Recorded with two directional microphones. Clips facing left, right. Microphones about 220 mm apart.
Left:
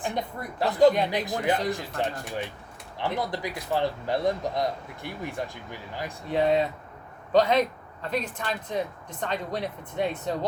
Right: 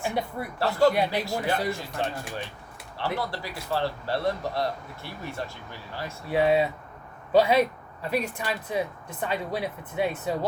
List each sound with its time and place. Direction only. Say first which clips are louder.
0.1 s speech: right 2 dB; 10° right (ahead or behind)
0.6 s speech: left 2 dB; 20° left (ahead or behind)
6.3 s speech: right 1 dB; 5° right (ahead or behind)